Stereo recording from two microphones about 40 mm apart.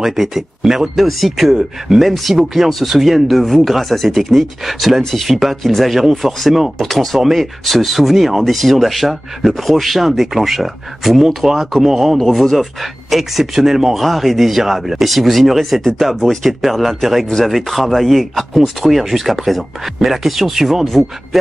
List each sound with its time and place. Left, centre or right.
0.0 s speech: centre
12.2 s speech: centre
20.8 s speech: centre